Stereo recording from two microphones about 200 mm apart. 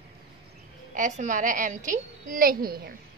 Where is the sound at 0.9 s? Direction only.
40° right (ahead or behind).